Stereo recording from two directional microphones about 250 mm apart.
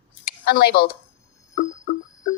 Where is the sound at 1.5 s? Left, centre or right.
Left.